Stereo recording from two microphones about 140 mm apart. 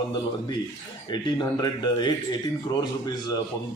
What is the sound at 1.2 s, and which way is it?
Speech, 30° left (ahead or behind).